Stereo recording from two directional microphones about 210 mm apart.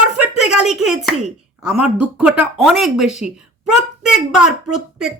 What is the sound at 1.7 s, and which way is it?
A woman's voice, 5° right (ahead or behind).